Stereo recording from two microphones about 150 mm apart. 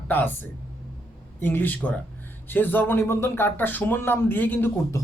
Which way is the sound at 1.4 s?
15° left (ahead or behind).